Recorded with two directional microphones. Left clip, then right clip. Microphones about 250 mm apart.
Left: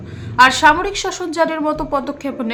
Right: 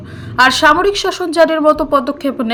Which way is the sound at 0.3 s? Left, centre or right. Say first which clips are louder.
Right 1 dB; centre.